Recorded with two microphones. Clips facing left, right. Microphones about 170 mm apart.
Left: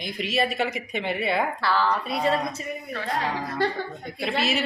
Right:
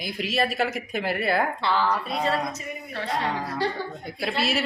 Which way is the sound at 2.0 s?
10° left (ahead or behind).